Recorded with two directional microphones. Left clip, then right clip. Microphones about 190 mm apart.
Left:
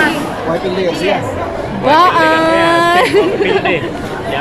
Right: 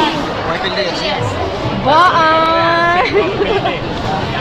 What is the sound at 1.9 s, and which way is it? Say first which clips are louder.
Speech: left 1 dB; 25° left (ahead or behind).